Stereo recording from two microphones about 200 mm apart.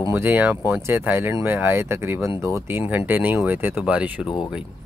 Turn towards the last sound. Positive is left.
turn(degrees=25)  # may be behind; listen again after turning